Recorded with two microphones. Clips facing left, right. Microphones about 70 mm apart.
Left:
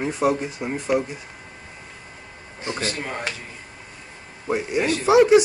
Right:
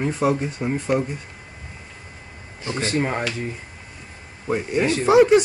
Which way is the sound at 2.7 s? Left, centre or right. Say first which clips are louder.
Right 7 dB; right.